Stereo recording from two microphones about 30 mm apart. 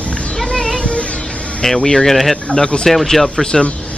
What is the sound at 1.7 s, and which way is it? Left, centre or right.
Speech, left.